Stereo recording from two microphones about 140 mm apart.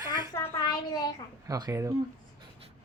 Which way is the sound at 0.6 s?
30° left (ahead or behind).